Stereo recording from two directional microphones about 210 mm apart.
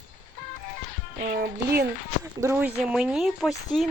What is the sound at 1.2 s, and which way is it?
Speech, 45° right (ahead or behind).